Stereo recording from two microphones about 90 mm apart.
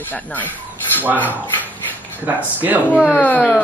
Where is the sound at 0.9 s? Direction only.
20° right (ahead or behind).